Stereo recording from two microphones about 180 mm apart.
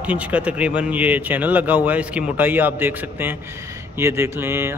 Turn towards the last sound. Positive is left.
turn(degrees=-15)  # may be behind; listen again after turning